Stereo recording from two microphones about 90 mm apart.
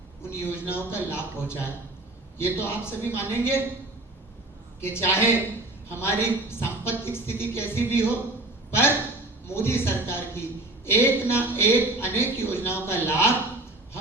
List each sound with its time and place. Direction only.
0.3 s a woman's voice: 25° left (ahead or behind)
4.8 s a woman's voice: 25° left (ahead or behind)
9.5 s a woman's voice: 25° left (ahead or behind)